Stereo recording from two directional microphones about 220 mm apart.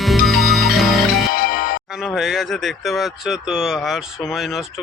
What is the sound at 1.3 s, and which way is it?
Music, 40° left (ahead or behind).